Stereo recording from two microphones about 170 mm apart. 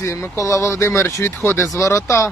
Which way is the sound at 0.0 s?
15° left (ahead or behind).